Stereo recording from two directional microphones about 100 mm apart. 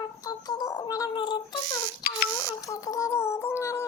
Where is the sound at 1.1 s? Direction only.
50° left (ahead or behind).